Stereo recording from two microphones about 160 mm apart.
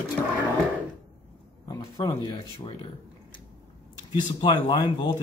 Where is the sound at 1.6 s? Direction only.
25° left (ahead or behind).